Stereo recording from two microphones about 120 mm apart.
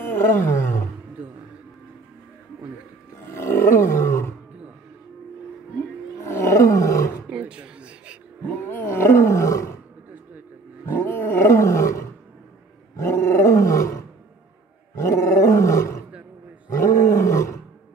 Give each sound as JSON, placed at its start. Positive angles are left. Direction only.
{"t": 0.0, "sound": "roar", "side_deg": 20}
{"t": 3.3, "sound": "roar", "side_deg": 20}
{"t": 6.2, "sound": "roar", "side_deg": 25}
{"t": 7.2, "sound": "music", "side_deg": -10}
{"t": 8.5, "sound": "roar", "side_deg": 20}
{"t": 10.9, "sound": "roar", "side_deg": 20}